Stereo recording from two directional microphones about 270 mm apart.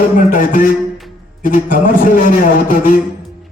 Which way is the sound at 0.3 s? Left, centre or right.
Left.